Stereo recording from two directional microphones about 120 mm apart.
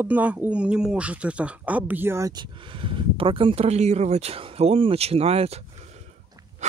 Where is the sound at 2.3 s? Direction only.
45° right (ahead or behind).